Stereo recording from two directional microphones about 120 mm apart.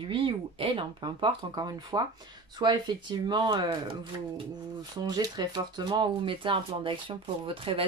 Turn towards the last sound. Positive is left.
turn(degrees=-50)  # may be behind; listen again after turning